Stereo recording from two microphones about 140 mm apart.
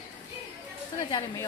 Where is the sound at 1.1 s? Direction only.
30° left (ahead or behind).